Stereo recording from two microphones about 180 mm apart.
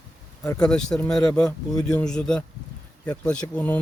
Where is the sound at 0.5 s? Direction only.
5° left (ahead or behind).